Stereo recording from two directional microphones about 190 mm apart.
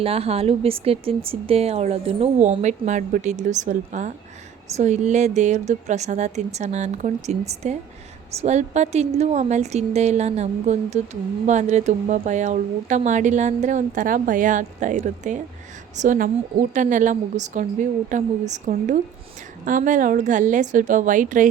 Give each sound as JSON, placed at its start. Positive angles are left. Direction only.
{"t": 0.0, "sound": "a woman's voice", "side_deg": -30}